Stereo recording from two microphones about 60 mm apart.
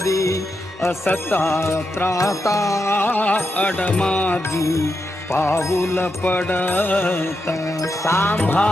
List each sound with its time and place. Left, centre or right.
0.0 s music: left
0.9 s music: left
2.0 s music: left
2.9 s music: left
3.9 s music: centre
4.4 s music: left
5.3 s music: left
6.2 s music: left
7.5 s music: left
8.2 s music: left